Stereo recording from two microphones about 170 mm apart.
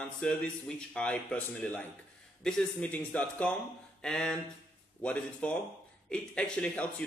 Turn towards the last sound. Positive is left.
turn(degrees=5)  # may be behind; listen again after turning